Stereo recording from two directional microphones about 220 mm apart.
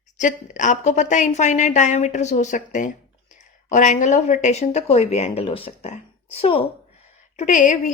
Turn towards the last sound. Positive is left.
turn(degrees=35)  # may be behind; listen again after turning